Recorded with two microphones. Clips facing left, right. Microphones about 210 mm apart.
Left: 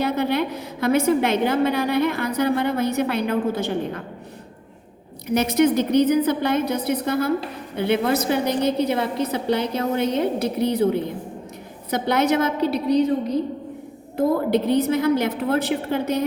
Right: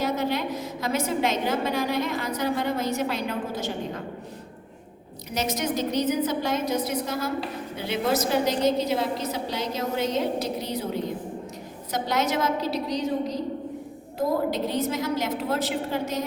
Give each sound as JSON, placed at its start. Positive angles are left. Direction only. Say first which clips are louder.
{"t": 0.0, "sound": "a woman's voice", "louder": "left 4 dB", "side_deg": 60}
{"t": 5.3, "sound": "a woman's voice", "louder": "left 9 dB", "side_deg": 60}